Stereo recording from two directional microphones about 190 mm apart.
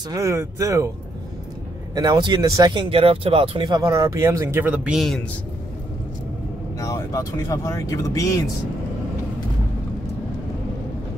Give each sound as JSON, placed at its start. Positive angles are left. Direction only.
{"t": 0.1, "sound": "speech", "side_deg": -15}
{"t": 2.0, "sound": "speech", "side_deg": -20}
{"t": 6.8, "sound": "speech", "side_deg": 15}